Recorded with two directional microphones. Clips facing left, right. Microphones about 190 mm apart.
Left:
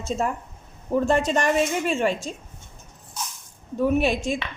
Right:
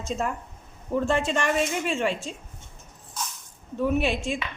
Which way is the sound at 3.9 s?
40° left (ahead or behind).